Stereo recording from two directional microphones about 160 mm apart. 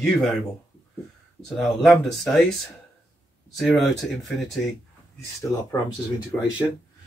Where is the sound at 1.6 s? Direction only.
Centre (ahead or behind).